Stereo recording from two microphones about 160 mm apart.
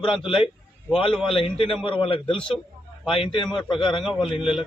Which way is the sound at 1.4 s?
35° left (ahead or behind).